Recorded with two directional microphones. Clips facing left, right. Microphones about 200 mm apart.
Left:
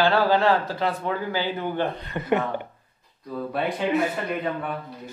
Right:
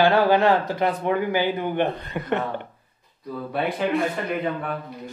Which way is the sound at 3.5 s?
Centre (ahead or behind).